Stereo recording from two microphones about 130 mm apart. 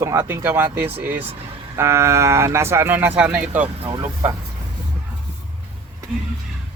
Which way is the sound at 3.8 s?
30° right (ahead or behind).